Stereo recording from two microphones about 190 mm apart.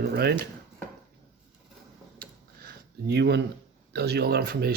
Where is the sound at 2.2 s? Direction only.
50° right (ahead or behind).